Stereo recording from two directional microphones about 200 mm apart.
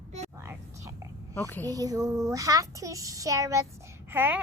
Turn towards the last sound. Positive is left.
turn(degrees=-10)  # may be behind; listen again after turning